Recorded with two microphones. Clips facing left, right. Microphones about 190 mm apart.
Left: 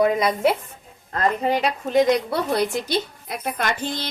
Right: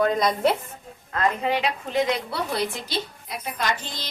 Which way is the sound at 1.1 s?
35° left (ahead or behind).